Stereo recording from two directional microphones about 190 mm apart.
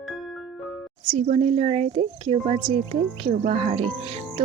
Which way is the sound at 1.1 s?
30° right (ahead or behind).